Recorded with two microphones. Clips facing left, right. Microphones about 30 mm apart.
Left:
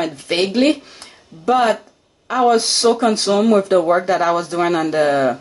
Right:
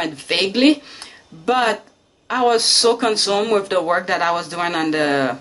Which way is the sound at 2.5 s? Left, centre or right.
Right.